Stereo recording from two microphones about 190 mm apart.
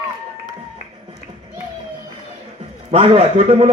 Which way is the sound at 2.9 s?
30° right (ahead or behind).